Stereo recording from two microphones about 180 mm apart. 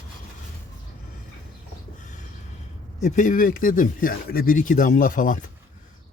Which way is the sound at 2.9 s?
45° left (ahead or behind).